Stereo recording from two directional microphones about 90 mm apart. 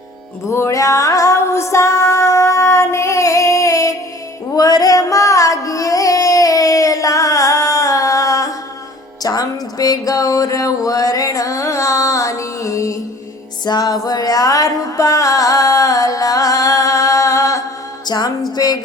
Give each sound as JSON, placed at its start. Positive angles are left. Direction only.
{"t": 0.5, "sound": "music", "side_deg": 35}
{"t": 13.7, "sound": "music", "side_deg": 50}
{"t": 18.0, "sound": "music", "side_deg": 50}